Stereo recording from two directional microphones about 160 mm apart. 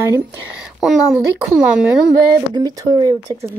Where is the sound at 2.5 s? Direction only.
25° right (ahead or behind).